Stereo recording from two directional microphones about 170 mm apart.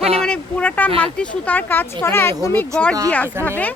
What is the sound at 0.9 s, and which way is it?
Speech, 35° right (ahead or behind).